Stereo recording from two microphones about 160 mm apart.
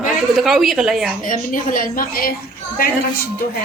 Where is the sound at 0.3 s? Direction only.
Centre (ahead or behind).